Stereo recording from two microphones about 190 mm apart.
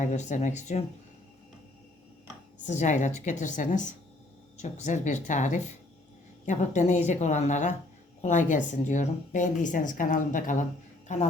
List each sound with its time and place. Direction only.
0.0 s a woman's voice: 40° left (ahead or behind)
2.6 s a woman's voice: 40° left (ahead or behind)